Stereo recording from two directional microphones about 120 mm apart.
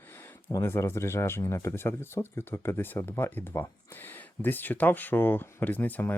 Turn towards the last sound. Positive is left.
turn(degrees=15)  # may be behind; listen again after turning